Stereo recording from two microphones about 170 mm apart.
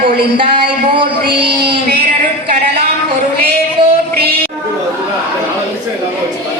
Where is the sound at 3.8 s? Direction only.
30° right (ahead or behind).